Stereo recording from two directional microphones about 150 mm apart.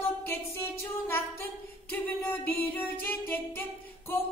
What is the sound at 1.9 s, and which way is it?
Singing, 10° left (ahead or behind).